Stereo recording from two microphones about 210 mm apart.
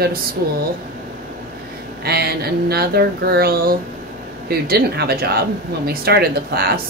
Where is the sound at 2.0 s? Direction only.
50° right (ahead or behind).